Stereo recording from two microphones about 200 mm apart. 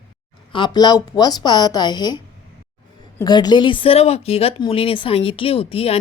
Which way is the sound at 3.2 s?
20° left (ahead or behind).